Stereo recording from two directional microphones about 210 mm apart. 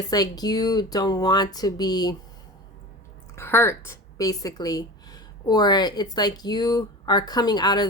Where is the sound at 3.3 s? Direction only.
10° left (ahead or behind).